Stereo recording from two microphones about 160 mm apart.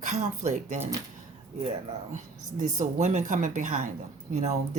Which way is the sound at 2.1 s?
50° right (ahead or behind).